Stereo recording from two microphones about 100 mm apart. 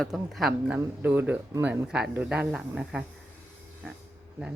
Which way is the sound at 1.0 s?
20° right (ahead or behind).